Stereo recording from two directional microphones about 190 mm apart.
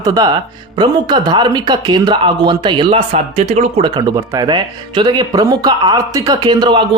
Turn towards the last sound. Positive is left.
turn(degrees=-25)  # may be behind; listen again after turning